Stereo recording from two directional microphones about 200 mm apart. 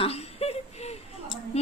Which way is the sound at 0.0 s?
30° left (ahead or behind).